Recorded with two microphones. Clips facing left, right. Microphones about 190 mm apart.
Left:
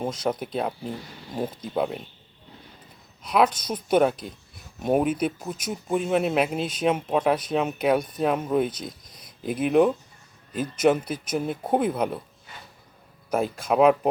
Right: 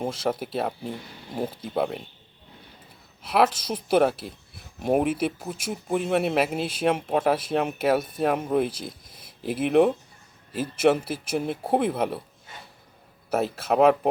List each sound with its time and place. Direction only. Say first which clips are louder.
0.0 s speech: even; 5° right (ahead or behind)
3.2 s speech: even; 5° right (ahead or behind)
13.3 s speech: even; 5° right (ahead or behind)